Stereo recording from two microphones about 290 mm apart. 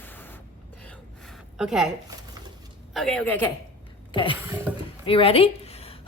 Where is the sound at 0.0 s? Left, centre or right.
Centre.